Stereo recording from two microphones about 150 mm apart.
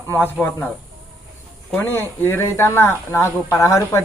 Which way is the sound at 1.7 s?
15° left (ahead or behind).